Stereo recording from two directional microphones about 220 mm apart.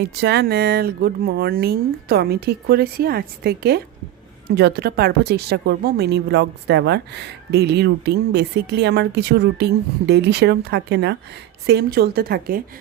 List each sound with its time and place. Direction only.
0.0 s speech: 50° right (ahead or behind)